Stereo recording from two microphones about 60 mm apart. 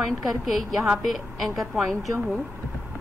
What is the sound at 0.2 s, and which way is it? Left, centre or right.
A woman's voice, centre.